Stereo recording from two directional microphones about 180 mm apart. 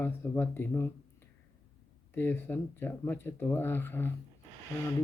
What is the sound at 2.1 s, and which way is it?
Speech, 10° left (ahead or behind).